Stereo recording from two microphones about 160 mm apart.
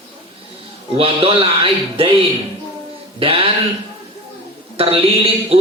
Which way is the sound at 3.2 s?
35° right (ahead or behind).